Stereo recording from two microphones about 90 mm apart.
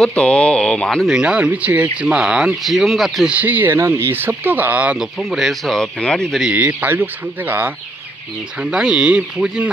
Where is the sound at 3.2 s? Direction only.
20° right (ahead or behind); by 6.5 s 5° left (ahead or behind).